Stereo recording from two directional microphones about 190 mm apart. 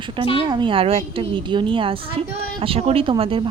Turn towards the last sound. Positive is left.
turn(degrees=-25)  # may be behind; listen again after turning